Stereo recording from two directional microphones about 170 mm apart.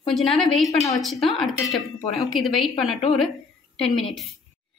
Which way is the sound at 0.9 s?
Centre (ahead or behind).